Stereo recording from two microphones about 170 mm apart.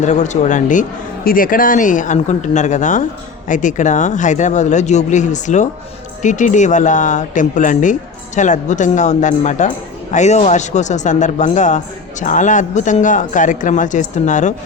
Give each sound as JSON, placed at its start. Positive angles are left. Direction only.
{"t": 0.0, "sound": "speech", "side_deg": 45}